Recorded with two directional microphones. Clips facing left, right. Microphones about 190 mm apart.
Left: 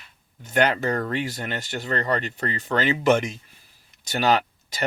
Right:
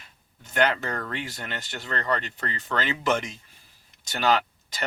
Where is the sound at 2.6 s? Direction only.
25° left (ahead or behind).